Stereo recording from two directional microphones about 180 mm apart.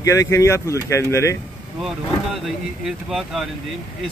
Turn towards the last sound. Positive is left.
turn(degrees=0)  # may be behind; listen again after turning